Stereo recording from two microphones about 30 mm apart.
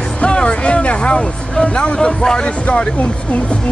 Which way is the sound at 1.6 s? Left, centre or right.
Left.